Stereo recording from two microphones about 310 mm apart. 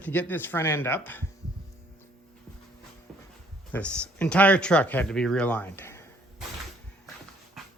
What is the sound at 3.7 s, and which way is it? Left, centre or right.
Speech, centre.